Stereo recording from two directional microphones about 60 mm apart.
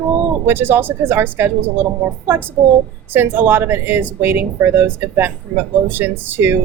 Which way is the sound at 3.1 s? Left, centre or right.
Right.